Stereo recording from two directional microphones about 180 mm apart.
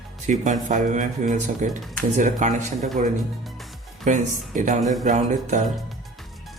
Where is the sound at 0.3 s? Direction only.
45° right (ahead or behind).